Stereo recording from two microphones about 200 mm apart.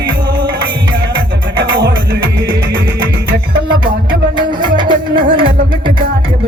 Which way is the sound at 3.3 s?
50° right (ahead or behind).